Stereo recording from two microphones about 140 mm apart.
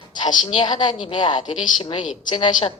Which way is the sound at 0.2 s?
35° left (ahead or behind).